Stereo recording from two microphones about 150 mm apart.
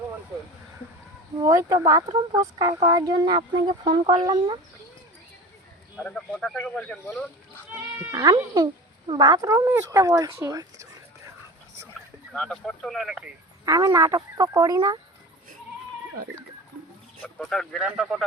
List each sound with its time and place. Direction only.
1.4 s speech: 20° right (ahead or behind)
6.0 s speech: 5° left (ahead or behind)
7.7 s speech: 20° right (ahead or behind)
12.3 s speech: 5° left (ahead or behind)
13.7 s speech: 20° right (ahead or behind)
17.2 s speech: 5° left (ahead or behind)